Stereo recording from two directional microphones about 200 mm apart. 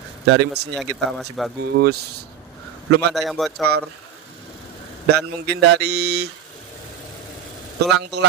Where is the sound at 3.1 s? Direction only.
Centre (ahead or behind).